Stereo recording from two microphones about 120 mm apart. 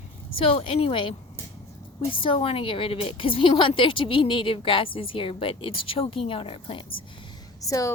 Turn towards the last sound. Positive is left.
turn(degrees=30)  # may be behind; listen again after turning